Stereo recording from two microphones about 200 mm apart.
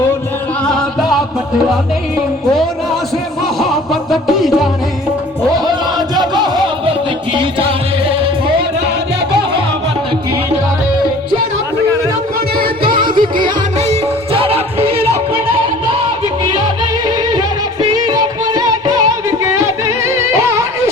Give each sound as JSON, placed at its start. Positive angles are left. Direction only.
{"t": 0.6, "sound": "music", "side_deg": 5}
{"t": 4.1, "sound": "music", "side_deg": 0}
{"t": 6.1, "sound": "music", "side_deg": -20}
{"t": 12.8, "sound": "music", "side_deg": -25}
{"t": 17.8, "sound": "music", "side_deg": -20}